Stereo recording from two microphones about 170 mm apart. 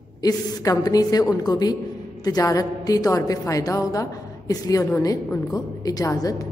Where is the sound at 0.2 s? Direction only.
20° left (ahead or behind).